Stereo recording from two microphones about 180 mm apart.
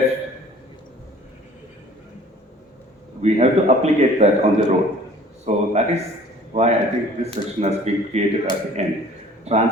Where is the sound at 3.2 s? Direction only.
35° right (ahead or behind).